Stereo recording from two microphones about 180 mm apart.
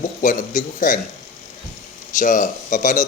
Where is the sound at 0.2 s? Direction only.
45° left (ahead or behind).